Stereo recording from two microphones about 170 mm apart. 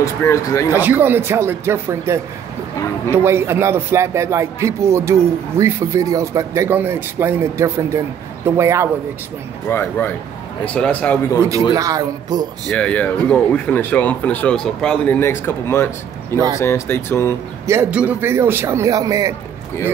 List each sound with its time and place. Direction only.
0.0 s speech: 20° left (ahead or behind)
0.7 s a man's voice: 10° right (ahead or behind)
9.7 s speech: 10° left (ahead or behind)
11.7 s a man's voice: 20° right (ahead or behind)
12.6 s speech: 5° left (ahead or behind)
17.6 s a man's voice: 15° right (ahead or behind)